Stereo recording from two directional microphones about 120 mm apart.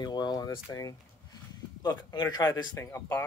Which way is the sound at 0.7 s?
30° left (ahead or behind).